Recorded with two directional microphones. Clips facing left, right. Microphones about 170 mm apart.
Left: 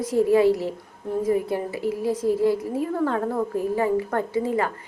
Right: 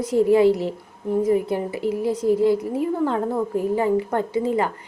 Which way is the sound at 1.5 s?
20° right (ahead or behind).